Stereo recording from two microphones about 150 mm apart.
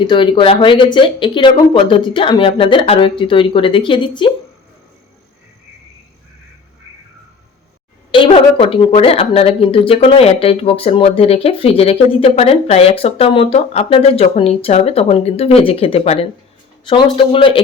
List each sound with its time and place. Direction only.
0.0 s speech: 35° left (ahead or behind)
8.1 s speech: 35° left (ahead or behind)